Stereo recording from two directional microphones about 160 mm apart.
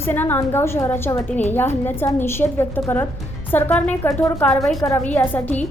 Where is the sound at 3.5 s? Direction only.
10° left (ahead or behind).